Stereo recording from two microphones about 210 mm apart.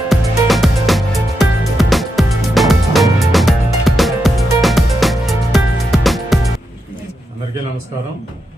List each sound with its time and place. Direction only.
0.1 s music: centre (ahead or behind)